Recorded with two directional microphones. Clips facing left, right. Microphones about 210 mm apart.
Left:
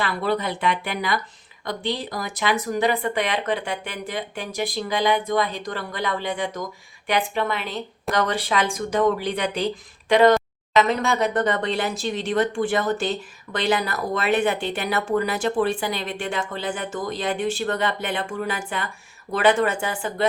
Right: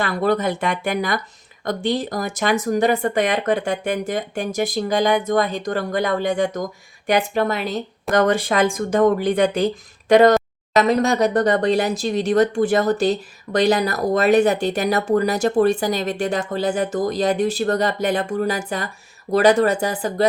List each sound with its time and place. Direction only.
0.0 s speech: 45° right (ahead or behind)